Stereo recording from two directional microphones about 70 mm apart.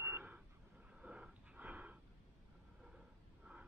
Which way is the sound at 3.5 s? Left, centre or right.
Centre.